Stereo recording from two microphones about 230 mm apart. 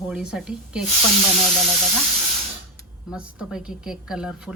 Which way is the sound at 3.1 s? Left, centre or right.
Centre.